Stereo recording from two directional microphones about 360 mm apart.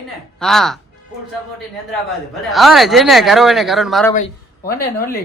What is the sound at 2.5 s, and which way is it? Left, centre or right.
A man's voice, centre.